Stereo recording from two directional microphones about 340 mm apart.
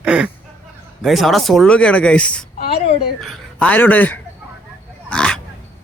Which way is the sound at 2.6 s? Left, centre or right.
Centre.